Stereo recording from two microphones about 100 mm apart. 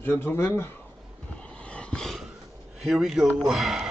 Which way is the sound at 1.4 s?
10° left (ahead or behind).